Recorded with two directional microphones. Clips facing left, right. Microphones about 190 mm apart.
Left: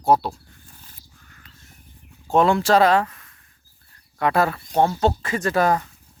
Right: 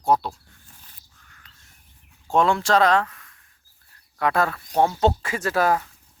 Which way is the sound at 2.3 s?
Centre (ahead or behind).